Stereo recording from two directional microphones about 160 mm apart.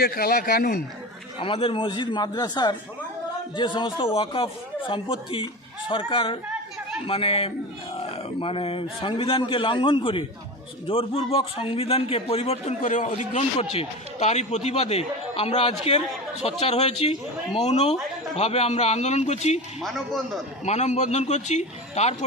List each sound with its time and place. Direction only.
0.0 s speech: 65° left (ahead or behind)
1.4 s a man's voice: 35° left (ahead or behind)
19.8 s speech: centre (ahead or behind)
20.6 s a man's voice: 45° left (ahead or behind)